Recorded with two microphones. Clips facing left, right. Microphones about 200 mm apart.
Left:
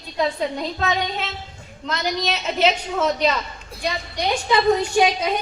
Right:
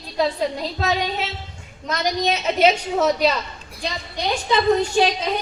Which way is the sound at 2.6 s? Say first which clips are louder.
Right 3 dB; 10° right (ahead or behind).